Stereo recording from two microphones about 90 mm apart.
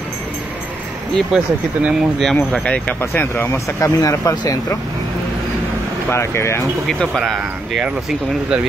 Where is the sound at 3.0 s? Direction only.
25° left (ahead or behind).